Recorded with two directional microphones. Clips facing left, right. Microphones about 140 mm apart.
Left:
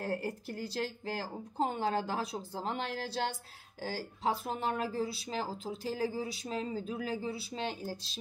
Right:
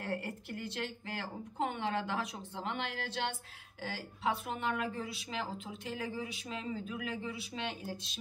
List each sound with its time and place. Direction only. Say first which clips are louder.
0.0 s a woman's voice: left 3 dB; 35° left (ahead or behind)